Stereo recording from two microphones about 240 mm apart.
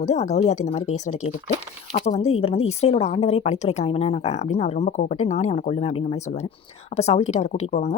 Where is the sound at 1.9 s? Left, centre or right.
Left.